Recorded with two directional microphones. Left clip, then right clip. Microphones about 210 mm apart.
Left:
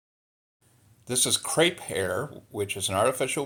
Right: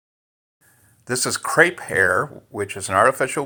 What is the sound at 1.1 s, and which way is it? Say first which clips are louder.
Speech: right 7 dB; 35° right (ahead or behind).